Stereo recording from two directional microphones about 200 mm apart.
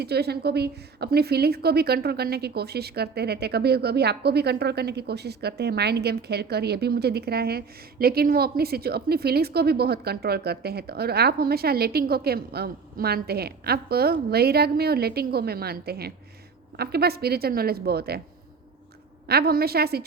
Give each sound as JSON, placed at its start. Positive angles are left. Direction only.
{"t": 0.0, "sound": "a woman's voice", "side_deg": -55}
{"t": 19.3, "sound": "a woman's voice", "side_deg": -50}